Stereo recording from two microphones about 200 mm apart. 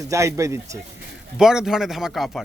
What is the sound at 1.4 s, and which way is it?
Speech, centre (ahead or behind).